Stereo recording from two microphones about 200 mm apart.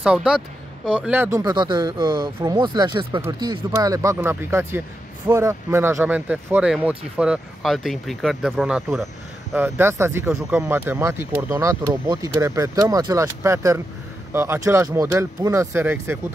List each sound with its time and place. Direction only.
0.0 s speech: 5° right (ahead or behind)